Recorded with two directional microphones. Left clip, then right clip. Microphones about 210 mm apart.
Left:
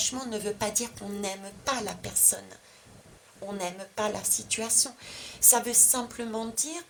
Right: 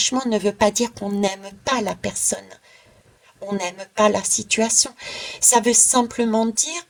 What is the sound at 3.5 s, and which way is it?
Speech, 40° right (ahead or behind).